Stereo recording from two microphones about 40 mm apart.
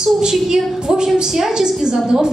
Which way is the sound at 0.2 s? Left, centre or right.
Centre.